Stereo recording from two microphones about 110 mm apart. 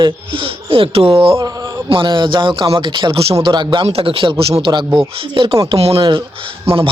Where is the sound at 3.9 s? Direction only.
60° right (ahead or behind).